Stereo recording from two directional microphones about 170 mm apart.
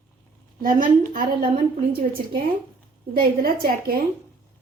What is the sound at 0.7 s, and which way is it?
Speech, 55° right (ahead or behind).